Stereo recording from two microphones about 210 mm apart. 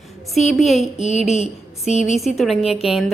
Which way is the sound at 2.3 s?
Centre (ahead or behind).